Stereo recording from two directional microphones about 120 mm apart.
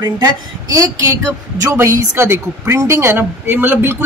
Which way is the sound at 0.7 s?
25° right (ahead or behind).